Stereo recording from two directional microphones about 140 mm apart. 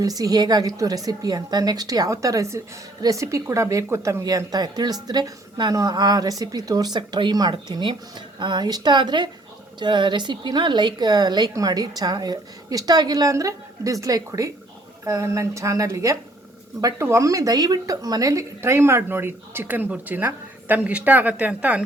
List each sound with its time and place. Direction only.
0.0 s a woman's voice: 25° right (ahead or behind); by 21.8 s 10° right (ahead or behind)